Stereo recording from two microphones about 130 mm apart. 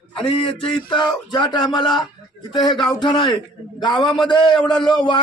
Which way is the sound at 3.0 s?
35° left (ahead or behind).